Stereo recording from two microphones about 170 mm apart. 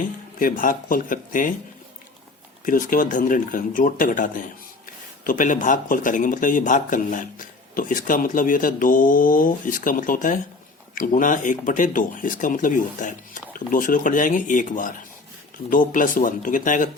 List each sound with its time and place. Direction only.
0.0 s speech: 50° left (ahead or behind)
2.6 s speech: 55° left (ahead or behind)